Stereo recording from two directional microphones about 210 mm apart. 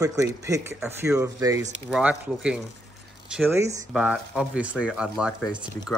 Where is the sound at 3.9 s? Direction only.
5° right (ahead or behind).